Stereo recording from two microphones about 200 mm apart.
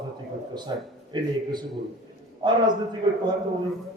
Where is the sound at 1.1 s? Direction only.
20° right (ahead or behind).